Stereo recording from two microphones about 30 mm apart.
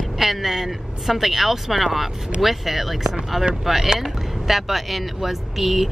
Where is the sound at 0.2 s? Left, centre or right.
Centre.